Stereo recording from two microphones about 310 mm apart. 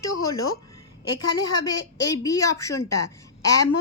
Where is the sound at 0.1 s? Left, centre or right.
Left.